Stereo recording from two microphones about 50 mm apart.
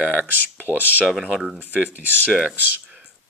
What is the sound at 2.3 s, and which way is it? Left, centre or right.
Speech, centre.